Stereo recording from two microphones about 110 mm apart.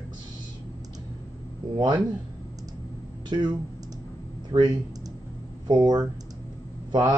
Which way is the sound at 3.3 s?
40° right (ahead or behind).